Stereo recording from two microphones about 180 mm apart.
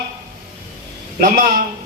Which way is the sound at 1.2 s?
55° right (ahead or behind).